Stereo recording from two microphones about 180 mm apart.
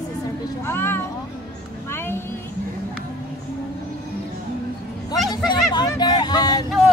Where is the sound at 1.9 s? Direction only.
15° left (ahead or behind).